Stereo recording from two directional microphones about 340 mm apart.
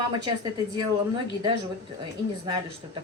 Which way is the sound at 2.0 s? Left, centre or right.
Centre.